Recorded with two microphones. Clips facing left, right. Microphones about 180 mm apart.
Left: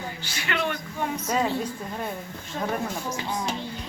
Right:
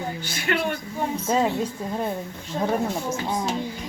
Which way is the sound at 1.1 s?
25° right (ahead or behind).